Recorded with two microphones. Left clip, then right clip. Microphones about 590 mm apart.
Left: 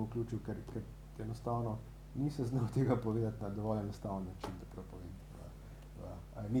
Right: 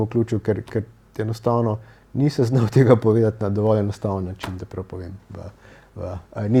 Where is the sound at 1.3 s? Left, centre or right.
Right.